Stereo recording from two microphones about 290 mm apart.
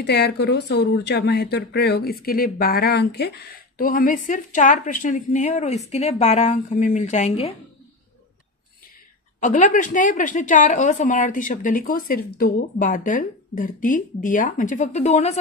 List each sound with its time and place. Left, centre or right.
0.0 s a woman's voice: left
9.4 s a woman's voice: left